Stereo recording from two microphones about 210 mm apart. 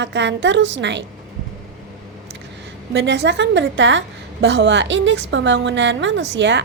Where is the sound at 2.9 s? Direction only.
60° right (ahead or behind).